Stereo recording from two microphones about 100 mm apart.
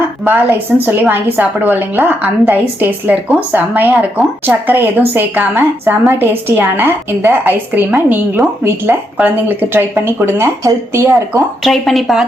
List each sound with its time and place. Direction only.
0.3 s a woman's voice: 20° right (ahead or behind)
11.6 s speech: 5° left (ahead or behind)